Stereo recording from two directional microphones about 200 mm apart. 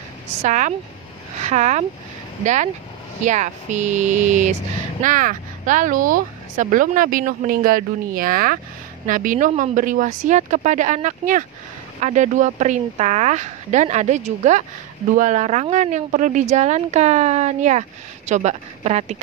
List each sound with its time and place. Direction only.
0.4 s speech: 35° right (ahead or behind)